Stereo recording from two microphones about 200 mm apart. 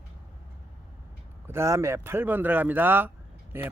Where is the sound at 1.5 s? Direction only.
15° right (ahead or behind).